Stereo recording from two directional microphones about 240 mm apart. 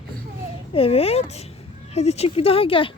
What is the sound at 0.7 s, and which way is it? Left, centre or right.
Speech, left.